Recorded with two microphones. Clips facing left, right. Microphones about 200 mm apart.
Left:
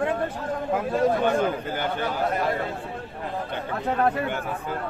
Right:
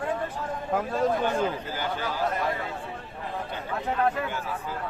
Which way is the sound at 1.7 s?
55° left (ahead or behind).